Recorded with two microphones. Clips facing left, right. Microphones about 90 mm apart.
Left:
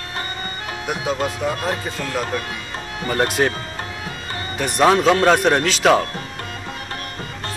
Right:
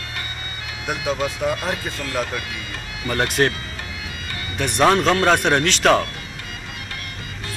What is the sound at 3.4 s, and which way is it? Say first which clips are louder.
Speech: even; 5° left (ahead or behind).